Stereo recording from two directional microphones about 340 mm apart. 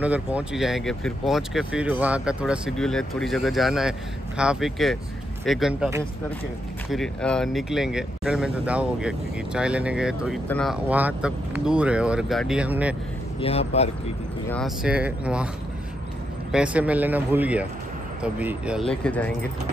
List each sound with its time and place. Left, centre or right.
0.0 s speech: centre
13.4 s speech: centre
14.5 s speech: centre
16.5 s speech: centre